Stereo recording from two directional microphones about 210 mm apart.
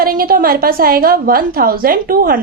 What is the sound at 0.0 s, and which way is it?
A woman's voice, 45° right (ahead or behind).